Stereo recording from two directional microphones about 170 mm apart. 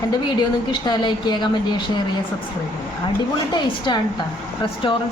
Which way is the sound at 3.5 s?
25° left (ahead or behind).